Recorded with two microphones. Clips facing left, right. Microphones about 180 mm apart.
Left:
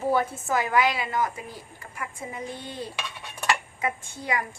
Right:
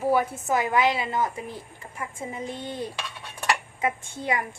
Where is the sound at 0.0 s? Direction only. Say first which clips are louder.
Right 1 dB; 10° right (ahead or behind).